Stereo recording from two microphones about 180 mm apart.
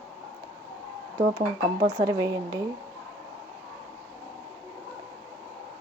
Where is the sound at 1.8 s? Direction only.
20° right (ahead or behind).